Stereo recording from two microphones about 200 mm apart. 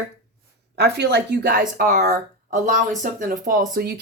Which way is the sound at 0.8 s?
60° right (ahead or behind).